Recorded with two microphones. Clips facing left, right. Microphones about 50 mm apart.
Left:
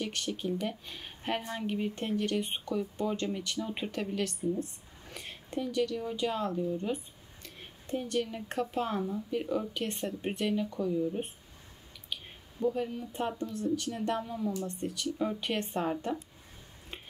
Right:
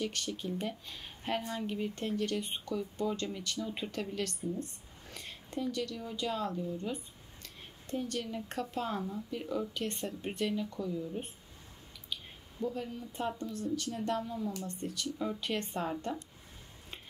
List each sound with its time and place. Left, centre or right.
0.0 s speech: left
4.0 s speech: centre
7.4 s a sound: centre
8.0 s speech: left
12.5 s speech: centre